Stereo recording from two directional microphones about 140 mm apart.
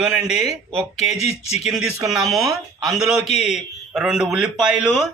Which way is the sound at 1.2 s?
50° left (ahead or behind).